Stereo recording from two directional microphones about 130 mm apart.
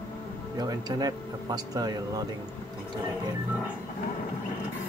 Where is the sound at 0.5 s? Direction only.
30° right (ahead or behind).